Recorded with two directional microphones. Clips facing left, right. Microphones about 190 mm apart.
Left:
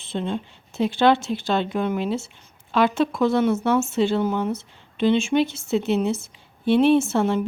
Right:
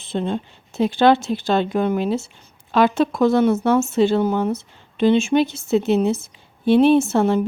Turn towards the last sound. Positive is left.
turn(degrees=-40)  # may be behind; listen again after turning